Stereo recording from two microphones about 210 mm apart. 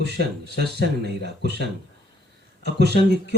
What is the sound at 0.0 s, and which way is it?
Speech, 50° right (ahead or behind).